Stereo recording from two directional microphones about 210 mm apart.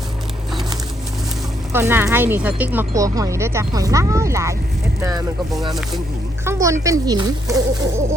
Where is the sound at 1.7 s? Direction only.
10° right (ahead or behind).